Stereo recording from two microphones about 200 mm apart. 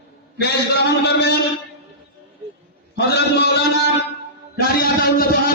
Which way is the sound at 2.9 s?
55° left (ahead or behind).